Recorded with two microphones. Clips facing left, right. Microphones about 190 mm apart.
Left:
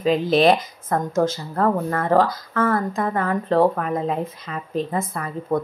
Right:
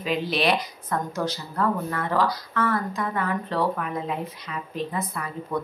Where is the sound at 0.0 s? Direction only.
45° left (ahead or behind).